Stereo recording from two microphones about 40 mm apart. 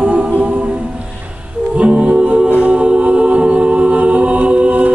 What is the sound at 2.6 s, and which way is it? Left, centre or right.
A capella, right.